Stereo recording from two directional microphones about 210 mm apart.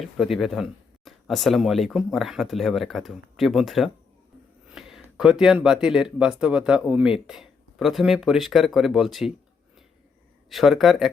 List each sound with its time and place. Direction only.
0.0 s speech: centre (ahead or behind)
10.5 s speech: centre (ahead or behind)